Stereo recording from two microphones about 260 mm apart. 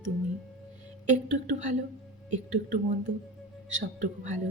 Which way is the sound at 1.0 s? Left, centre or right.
Right.